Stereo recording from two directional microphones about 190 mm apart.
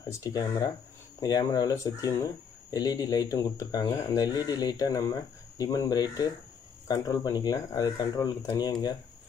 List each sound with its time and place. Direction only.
0.1 s speech: 20° left (ahead or behind)